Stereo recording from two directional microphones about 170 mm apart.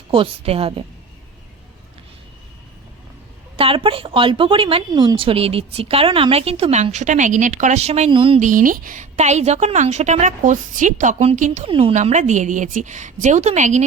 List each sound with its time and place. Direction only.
0.1 s a woman's voice: 35° right (ahead or behind)
3.6 s a woman's voice: 30° right (ahead or behind)
8.4 s a woman's voice: 50° right (ahead or behind)